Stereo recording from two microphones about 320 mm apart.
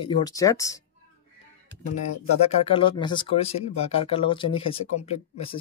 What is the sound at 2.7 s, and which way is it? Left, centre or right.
Speech, centre.